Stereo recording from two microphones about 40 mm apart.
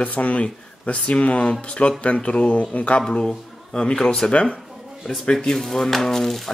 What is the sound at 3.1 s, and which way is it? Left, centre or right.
Speech, centre.